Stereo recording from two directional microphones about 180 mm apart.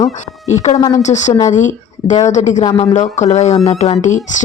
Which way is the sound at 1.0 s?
40° left (ahead or behind).